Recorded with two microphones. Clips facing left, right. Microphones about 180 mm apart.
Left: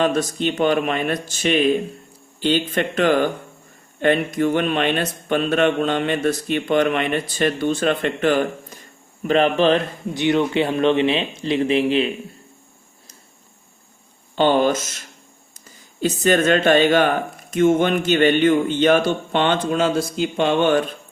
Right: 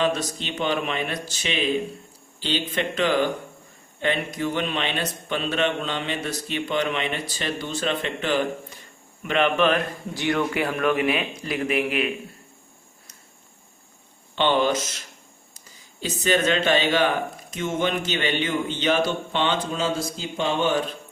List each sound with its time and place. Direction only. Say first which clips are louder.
0.0 s speech: left 5 dB; 50° left (ahead or behind)
9.2 s speech: left 4 dB; 35° left (ahead or behind)
14.3 s speech: left 4 dB; 45° left (ahead or behind); by 20.8 s 60° left (ahead or behind)